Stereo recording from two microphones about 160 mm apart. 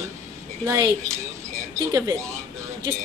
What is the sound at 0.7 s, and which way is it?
Speech, 20° right (ahead or behind).